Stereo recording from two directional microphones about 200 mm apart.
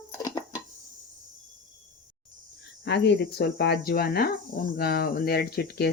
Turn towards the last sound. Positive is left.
turn(degrees=55)  # may be behind; listen again after turning